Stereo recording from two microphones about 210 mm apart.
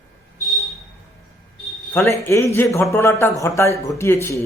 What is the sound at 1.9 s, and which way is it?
A man's voice, 10° left (ahead or behind).